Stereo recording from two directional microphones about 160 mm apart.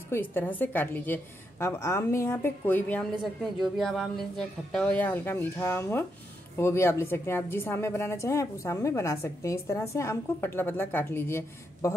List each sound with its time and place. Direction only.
0.1 s a woman's voice: 15° left (ahead or behind)
3.2 s a woman's voice: centre (ahead or behind); by 11.9 s 15° left (ahead or behind)